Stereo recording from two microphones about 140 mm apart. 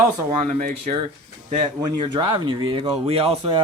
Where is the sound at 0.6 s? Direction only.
80° right.